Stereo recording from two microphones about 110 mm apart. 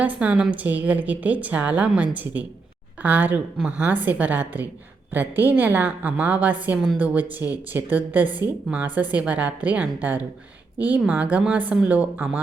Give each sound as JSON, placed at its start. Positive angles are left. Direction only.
{"t": 0.0, "sound": "a woman's voice", "side_deg": -10}